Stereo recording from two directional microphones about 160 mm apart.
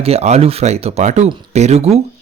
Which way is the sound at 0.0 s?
40° right (ahead or behind).